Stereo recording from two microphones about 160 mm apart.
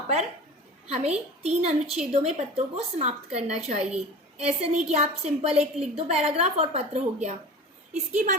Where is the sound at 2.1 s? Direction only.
40° right (ahead or behind).